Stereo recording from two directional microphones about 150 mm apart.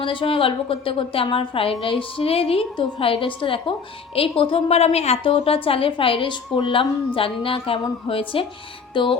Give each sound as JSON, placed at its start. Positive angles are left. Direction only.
{"t": 0.0, "sound": "a woman's voice", "side_deg": 35}
{"t": 8.9, "sound": "music", "side_deg": 35}